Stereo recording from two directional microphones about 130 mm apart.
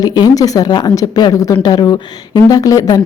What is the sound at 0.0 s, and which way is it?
A woman's voice, 30° left (ahead or behind).